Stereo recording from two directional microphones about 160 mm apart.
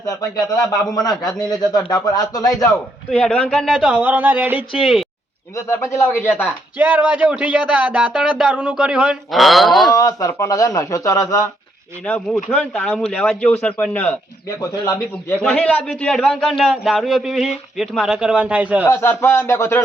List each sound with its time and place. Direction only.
0.2 s speech: 25° left (ahead or behind)
3.1 s a man's voice: 5° left (ahead or behind); by 4.6 s 10° right (ahead or behind)
4.8 s a man's voice: centre (ahead or behind)
5.5 s speech: 15° left (ahead or behind)
6.7 s speech: 10° right (ahead or behind)
9.9 s speech: 20° left (ahead or behind)
12.0 s a man's voice: 10° left (ahead or behind); by 18.9 s 10° right (ahead or behind)
18.9 s speech: 15° left (ahead or behind)